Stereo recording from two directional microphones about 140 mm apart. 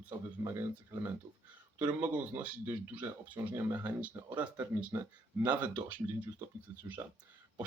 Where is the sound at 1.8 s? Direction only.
10° right (ahead or behind).